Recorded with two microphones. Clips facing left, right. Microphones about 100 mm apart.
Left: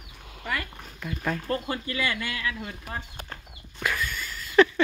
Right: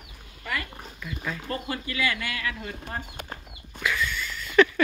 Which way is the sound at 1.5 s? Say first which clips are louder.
Left 2 dB; 30° left (ahead or behind).